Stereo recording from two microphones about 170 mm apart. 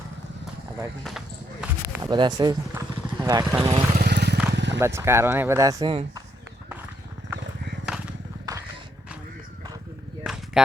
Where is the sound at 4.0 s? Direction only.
75° right (ahead or behind).